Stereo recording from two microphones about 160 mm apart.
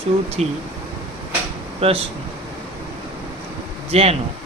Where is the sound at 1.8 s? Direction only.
40° right (ahead or behind).